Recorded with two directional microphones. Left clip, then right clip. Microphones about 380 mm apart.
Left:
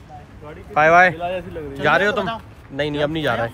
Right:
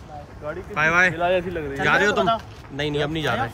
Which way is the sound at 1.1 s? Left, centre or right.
Right.